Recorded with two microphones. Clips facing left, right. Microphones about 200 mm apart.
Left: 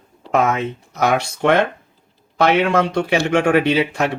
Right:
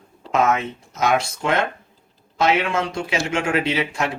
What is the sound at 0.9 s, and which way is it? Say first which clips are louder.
A man's voice: left 2 dB; 65° left (ahead or behind).